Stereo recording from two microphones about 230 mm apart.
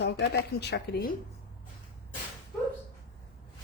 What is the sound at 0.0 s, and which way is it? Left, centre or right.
Speech, left.